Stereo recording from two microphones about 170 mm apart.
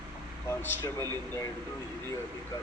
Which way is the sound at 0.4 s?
15° left (ahead or behind).